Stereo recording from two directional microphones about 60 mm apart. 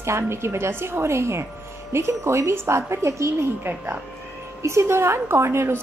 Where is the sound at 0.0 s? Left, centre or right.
Right.